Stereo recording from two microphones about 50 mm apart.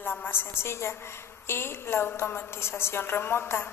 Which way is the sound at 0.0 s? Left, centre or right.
Left.